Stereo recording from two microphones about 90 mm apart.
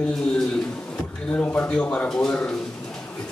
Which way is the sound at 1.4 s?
15° left (ahead or behind).